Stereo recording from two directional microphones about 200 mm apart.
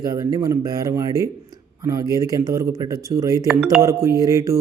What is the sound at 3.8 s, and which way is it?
Speech, 15° right (ahead or behind).